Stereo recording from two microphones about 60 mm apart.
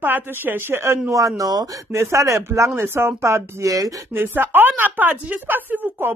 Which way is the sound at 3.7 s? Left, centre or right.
Right.